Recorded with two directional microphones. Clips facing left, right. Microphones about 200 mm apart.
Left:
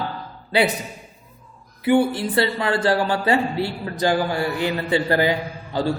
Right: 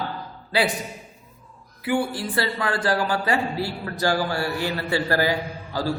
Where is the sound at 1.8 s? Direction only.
25° left (ahead or behind).